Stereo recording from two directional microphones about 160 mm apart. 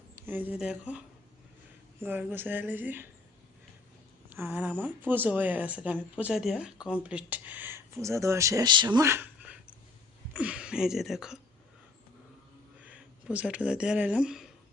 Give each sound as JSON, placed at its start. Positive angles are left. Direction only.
{"t": 0.3, "sound": "speech", "side_deg": -10}
{"t": 4.3, "sound": "speech", "side_deg": -10}
{"t": 9.0, "sound": "a sound", "side_deg": -15}
{"t": 10.3, "sound": "speech", "side_deg": -5}
{"t": 12.8, "sound": "speech", "side_deg": -10}